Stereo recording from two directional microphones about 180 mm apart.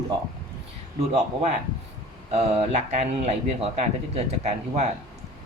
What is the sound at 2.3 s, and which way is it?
Speech, 35° right (ahead or behind).